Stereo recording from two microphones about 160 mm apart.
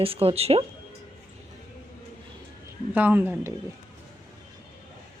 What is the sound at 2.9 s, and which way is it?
Speech, 10° right (ahead or behind).